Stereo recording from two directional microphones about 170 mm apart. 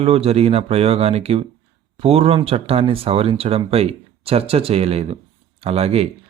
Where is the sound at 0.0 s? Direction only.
35° right (ahead or behind).